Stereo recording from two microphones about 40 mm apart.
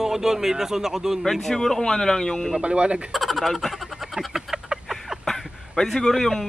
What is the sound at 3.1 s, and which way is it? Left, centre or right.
Speech, centre.